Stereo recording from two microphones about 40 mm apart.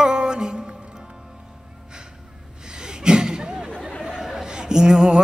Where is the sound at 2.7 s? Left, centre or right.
Centre.